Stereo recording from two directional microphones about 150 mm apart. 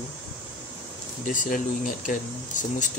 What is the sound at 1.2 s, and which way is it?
Speech, 60° left (ahead or behind).